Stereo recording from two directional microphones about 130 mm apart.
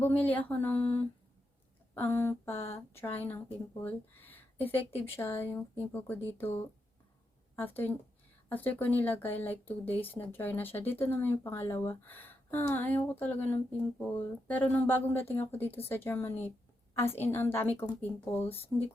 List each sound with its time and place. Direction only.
0.0 s speech: 15° left (ahead or behind)